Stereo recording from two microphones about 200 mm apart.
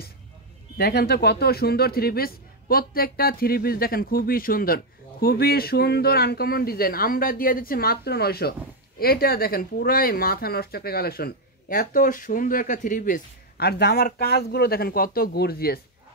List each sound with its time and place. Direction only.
0.7 s speech: 55° left (ahead or behind)